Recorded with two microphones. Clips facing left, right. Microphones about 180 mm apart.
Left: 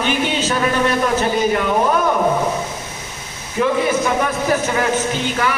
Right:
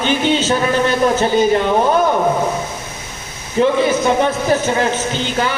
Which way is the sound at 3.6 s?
30° right (ahead or behind).